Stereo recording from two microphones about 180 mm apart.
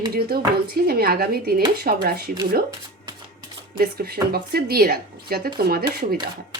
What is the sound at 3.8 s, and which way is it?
Speech, 60° right (ahead or behind).